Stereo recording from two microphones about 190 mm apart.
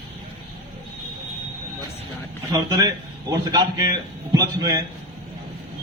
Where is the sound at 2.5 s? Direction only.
20° right (ahead or behind).